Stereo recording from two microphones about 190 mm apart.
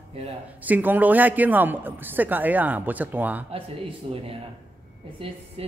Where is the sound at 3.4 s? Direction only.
30° right (ahead or behind).